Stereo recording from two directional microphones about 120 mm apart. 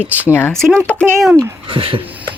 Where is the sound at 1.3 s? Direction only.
45° right (ahead or behind).